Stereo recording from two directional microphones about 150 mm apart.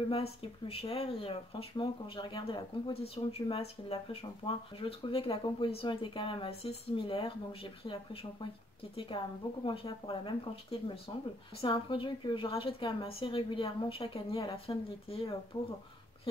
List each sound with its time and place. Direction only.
0.1 s speech: 40° left (ahead or behind)
15.5 s speech: 15° left (ahead or behind)